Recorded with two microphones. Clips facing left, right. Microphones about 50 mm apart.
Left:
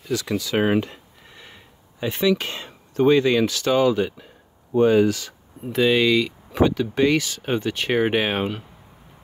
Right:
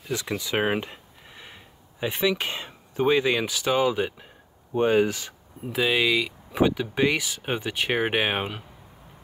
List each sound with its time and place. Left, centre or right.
0.3 s speech: centre
5.7 s speech: centre